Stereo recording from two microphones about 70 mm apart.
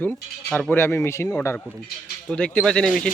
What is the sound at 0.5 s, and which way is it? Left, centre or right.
Speech, left.